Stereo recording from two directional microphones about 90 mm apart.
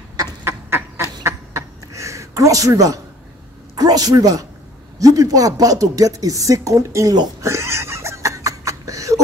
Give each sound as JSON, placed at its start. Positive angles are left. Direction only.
{"t": 0.5, "sound": "duck", "side_deg": -25}
{"t": 1.2, "sound": "a sound", "side_deg": -35}
{"t": 3.7, "sound": "a man's voice", "side_deg": -45}
{"t": 7.4, "sound": "laughter", "side_deg": -30}